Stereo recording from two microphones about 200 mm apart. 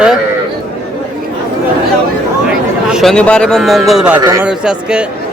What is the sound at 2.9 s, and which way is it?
Speech, centre (ahead or behind).